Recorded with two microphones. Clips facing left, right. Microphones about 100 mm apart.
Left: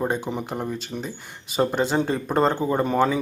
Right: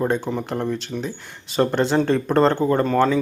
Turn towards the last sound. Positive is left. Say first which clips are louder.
# right 3 dB
turn(degrees=10)  # may be behind; listen again after turning